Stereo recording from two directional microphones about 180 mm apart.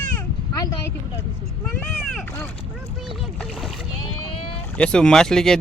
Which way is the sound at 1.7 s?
5° left (ahead or behind).